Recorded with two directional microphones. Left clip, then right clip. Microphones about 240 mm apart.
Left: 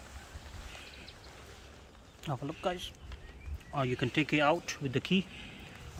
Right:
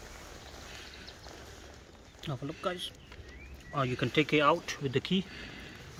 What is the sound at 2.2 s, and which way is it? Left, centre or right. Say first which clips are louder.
Speech: left 1 dB; centre.